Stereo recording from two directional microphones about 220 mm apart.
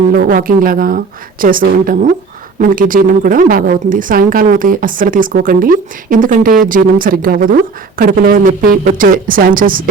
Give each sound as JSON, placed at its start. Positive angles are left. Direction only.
{"t": 0.1, "sound": "a woman's voice", "side_deg": -40}